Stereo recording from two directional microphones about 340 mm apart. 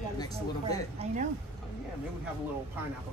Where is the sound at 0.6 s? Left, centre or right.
Centre.